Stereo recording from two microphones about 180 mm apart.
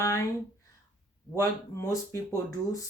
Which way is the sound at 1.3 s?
15° left (ahead or behind).